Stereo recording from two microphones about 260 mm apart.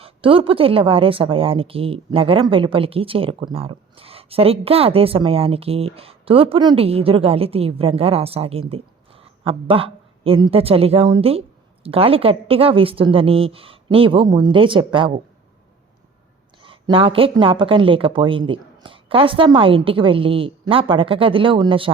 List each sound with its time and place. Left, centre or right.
0.0 s speech: right
16.6 s speech: centre